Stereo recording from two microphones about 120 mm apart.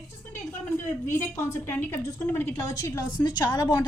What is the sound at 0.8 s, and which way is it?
A woman's voice, 20° left (ahead or behind).